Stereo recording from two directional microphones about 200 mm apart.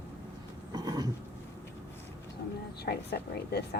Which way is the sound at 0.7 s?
20° right (ahead or behind).